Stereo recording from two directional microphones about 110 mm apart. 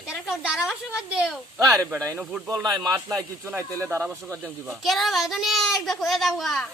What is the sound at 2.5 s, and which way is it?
Speech, 35° right (ahead or behind).